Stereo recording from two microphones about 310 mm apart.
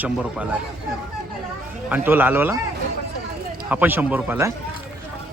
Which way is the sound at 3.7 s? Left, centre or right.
Centre.